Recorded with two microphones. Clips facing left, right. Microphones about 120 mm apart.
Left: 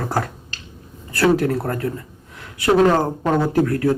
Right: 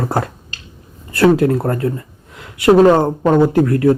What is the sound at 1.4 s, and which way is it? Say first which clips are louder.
A man's voice: right 5 dB; 25° right (ahead or behind).